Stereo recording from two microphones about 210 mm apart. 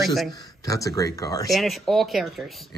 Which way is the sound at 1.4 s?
Centre (ahead or behind).